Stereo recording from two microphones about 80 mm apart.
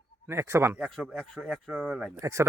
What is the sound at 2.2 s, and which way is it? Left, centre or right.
Speech, right.